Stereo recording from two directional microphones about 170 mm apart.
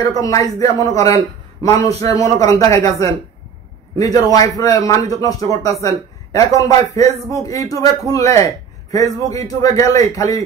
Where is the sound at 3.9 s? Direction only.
20° left (ahead or behind).